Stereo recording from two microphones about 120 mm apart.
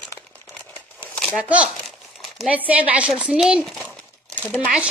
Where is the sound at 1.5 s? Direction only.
10° right (ahead or behind).